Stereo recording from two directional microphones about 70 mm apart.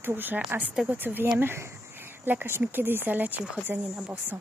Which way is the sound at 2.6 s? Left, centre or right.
Right.